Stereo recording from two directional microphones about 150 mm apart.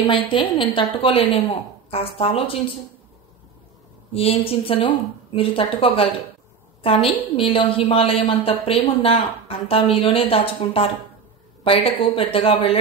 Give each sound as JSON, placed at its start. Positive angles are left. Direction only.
{"t": 0.0, "sound": "a woman's voice", "side_deg": 35}
{"t": 4.1, "sound": "a woman's voice", "side_deg": 40}